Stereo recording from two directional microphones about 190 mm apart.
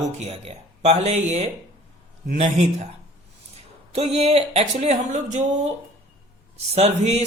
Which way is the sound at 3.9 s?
35° right (ahead or behind).